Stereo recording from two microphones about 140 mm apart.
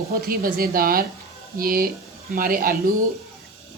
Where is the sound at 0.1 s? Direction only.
90° right.